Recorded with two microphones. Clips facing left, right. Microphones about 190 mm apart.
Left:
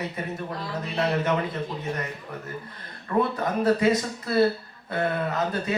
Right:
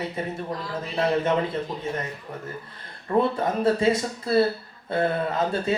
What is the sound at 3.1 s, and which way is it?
Speech, 30° right (ahead or behind).